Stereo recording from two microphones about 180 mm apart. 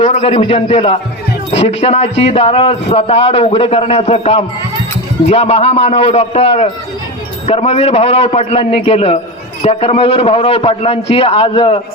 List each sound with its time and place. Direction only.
0.0 s a man's voice: 40° left (ahead or behind)